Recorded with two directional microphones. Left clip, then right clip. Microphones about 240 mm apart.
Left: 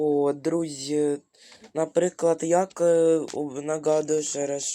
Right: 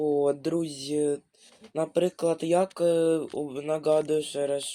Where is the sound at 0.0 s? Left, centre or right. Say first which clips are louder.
Left 2 dB; centre.